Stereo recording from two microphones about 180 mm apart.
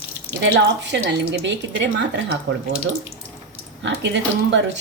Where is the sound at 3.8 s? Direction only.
85° right.